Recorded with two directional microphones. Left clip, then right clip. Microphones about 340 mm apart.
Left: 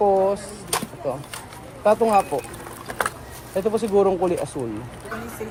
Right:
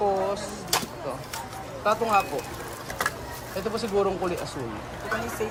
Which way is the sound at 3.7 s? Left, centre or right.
Centre.